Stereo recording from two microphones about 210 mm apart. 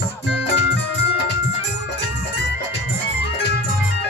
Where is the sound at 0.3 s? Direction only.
55° left (ahead or behind).